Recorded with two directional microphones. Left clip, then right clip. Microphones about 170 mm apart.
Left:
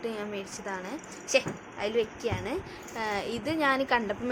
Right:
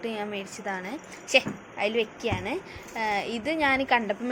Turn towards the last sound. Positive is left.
turn(degrees=-5)  # may be behind; listen again after turning